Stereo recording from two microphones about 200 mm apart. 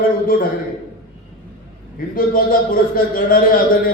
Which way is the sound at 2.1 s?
45° left (ahead or behind).